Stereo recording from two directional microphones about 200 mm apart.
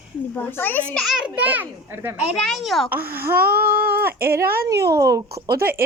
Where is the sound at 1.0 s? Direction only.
Centre (ahead or behind).